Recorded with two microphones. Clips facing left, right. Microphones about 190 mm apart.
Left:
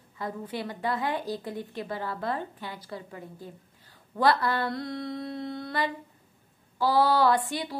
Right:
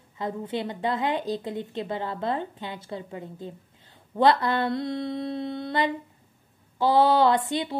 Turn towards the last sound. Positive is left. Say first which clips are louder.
# right 2 dB
turn(degrees=-20)  # may be behind; listen again after turning